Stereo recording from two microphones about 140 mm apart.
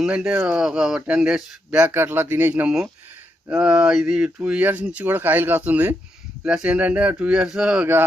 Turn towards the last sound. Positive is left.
turn(degrees=-5)  # may be behind; listen again after turning